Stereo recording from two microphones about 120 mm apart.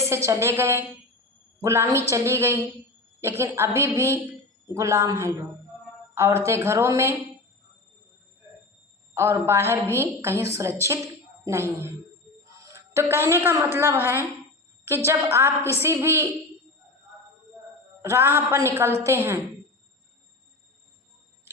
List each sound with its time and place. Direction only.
0.0 s a woman's voice: 25° right (ahead or behind)
9.1 s a woman's voice: 25° right (ahead or behind)
12.5 s a sound: 25° right (ahead or behind)
13.2 s a woman's voice: 20° right (ahead or behind)
18.0 s a woman's voice: 20° right (ahead or behind)